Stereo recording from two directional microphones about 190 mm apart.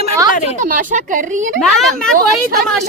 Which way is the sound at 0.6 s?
45° right (ahead or behind).